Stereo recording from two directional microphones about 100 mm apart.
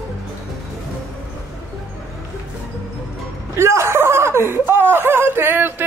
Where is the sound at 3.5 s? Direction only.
25° right (ahead or behind).